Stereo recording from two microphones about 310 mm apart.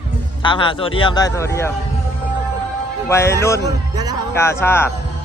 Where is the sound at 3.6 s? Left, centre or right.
Centre.